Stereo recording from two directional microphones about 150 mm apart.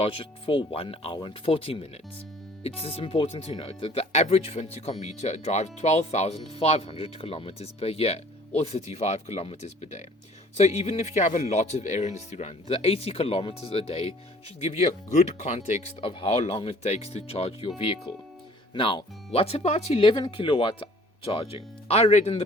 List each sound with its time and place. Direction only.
0.0 s speech: 40° left (ahead or behind)
18.7 s speech: 35° left (ahead or behind)